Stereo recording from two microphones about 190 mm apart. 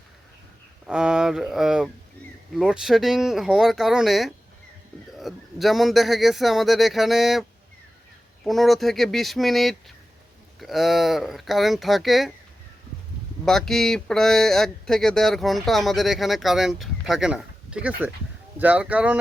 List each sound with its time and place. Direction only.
0.9 s speech: 5° right (ahead or behind)
8.4 s speech: centre (ahead or behind)
13.4 s speech: centre (ahead or behind)